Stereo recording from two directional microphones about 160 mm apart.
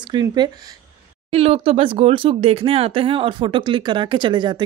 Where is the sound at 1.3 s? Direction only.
40° right (ahead or behind).